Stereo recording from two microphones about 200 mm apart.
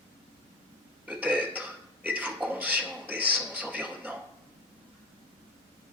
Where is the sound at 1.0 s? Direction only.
5° right (ahead or behind).